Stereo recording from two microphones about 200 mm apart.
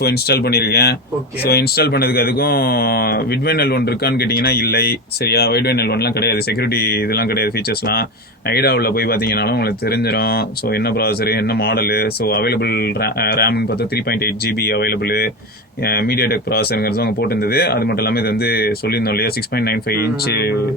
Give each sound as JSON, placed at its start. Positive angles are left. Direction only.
{"t": 0.0, "sound": "speech", "side_deg": 50}